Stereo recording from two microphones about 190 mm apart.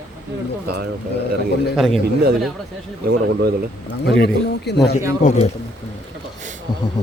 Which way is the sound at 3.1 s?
60° right (ahead or behind).